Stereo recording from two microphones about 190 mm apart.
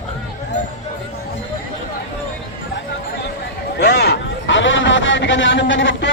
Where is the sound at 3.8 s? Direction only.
60° left (ahead or behind).